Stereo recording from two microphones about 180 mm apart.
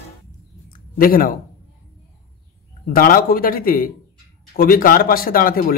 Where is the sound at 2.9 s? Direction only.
50° left (ahead or behind).